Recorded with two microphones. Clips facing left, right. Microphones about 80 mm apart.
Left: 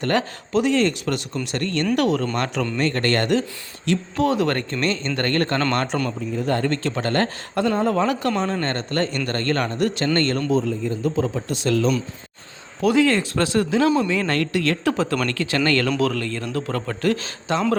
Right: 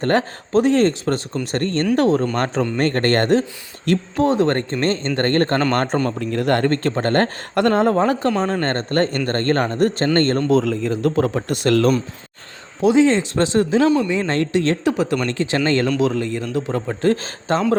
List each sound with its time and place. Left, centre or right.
0.0 s a man's voice: right
4.2 s a man's voice: right
6.1 s speech: right
6.7 s speech: right
7.5 s speech: right
7.9 s a man's voice: right
10.5 s a man's voice: right
11.1 s speech: right
12.8 s speech: right
14.8 s speech: centre
17.1 s a man's voice: right